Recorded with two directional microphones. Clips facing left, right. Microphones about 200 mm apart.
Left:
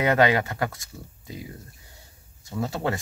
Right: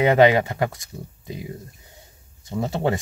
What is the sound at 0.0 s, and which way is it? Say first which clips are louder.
Speech: right 5 dB; 20° right (ahead or behind).